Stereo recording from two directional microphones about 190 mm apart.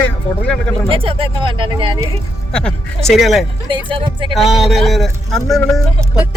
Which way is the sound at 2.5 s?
5° left (ahead or behind).